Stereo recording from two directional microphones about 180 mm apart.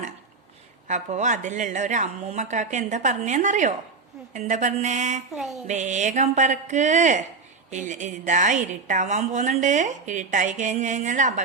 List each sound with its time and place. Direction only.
0.9 s a woman's voice: 40° right (ahead or behind)
5.3 s a sound: centre (ahead or behind)
5.6 s a woman's voice: 40° right (ahead or behind)